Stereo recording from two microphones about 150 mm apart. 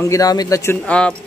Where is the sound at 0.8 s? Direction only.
10° left (ahead or behind).